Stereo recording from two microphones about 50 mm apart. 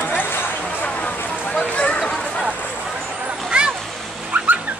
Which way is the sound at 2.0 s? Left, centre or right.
Centre.